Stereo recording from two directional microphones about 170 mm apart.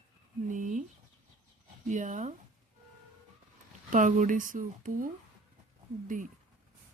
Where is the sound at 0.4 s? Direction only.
50° right (ahead or behind).